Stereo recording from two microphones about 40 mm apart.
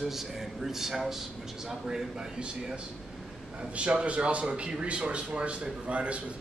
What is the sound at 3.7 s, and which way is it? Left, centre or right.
A man's voice, right.